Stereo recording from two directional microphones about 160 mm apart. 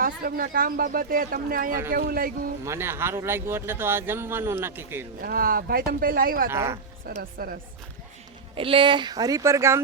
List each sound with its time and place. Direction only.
0.0 s speech: 65° right (ahead or behind)
2.6 s speech: 15° right (ahead or behind)
5.2 s speech: 65° right (ahead or behind)
6.5 s speech: 15° right (ahead or behind)
7.2 s a woman's voice: 65° right (ahead or behind)
8.5 s speech: 35° right (ahead or behind); by 9.8 s 15° right (ahead or behind)